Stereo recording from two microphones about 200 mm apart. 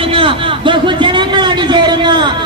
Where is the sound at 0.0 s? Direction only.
25° right (ahead or behind).